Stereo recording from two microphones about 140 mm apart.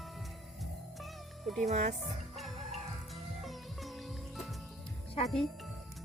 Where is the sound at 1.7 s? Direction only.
55° right (ahead or behind).